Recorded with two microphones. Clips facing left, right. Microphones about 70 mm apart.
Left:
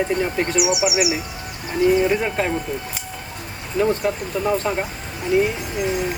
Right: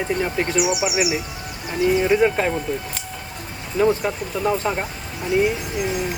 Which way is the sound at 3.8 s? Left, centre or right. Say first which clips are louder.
Right 1 dB; centre.